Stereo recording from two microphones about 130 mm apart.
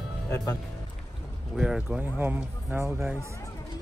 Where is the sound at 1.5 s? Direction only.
5° right (ahead or behind).